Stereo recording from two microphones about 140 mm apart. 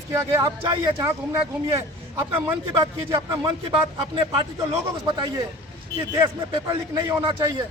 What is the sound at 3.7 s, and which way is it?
Speech, 35° right (ahead or behind).